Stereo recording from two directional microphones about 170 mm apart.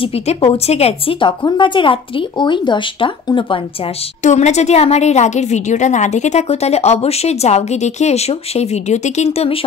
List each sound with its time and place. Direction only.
0.0 s a woman's voice: 35° left (ahead or behind)
4.2 s a woman's voice: 45° left (ahead or behind)